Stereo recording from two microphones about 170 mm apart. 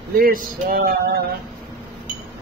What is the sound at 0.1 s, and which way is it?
Speech, 60° right (ahead or behind).